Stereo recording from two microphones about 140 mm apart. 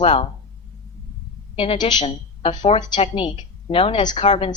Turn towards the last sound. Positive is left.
turn(degrees=45)  # may be behind; listen again after turning